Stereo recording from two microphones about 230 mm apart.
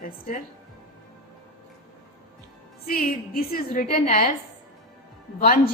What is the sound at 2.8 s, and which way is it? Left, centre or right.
A woman's voice, left.